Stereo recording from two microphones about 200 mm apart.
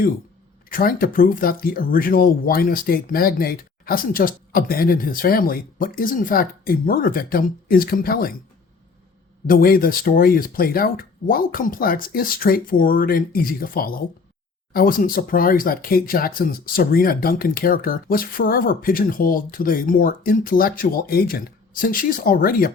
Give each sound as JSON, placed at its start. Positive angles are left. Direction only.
{"t": 0.7, "sound": "speech", "side_deg": 45}
{"t": 9.5, "sound": "speech", "side_deg": 45}